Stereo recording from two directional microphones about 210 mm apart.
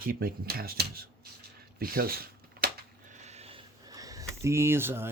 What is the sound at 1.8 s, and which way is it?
Shuffling cards, 45° right (ahead or behind).